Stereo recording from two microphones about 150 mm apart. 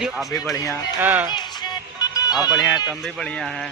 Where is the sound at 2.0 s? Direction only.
25° left (ahead or behind).